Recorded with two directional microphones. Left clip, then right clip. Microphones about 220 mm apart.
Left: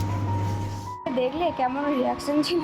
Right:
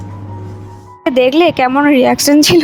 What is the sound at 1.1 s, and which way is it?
A woman's voice, 45° right (ahead or behind).